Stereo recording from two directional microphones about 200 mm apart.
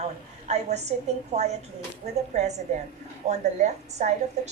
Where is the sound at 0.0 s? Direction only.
35° right (ahead or behind).